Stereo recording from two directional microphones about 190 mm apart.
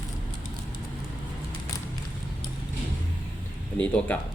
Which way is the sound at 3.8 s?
5° left (ahead or behind).